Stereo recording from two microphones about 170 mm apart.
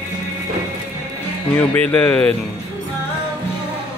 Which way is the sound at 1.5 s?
10° left (ahead or behind).